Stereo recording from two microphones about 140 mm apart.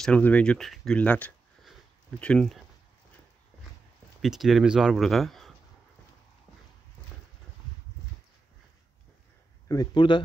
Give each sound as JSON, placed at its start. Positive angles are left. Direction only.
{"t": 0.0, "sound": "speech", "side_deg": 10}
{"t": 4.2, "sound": "speech", "side_deg": 0}
{"t": 9.7, "sound": "speech", "side_deg": 30}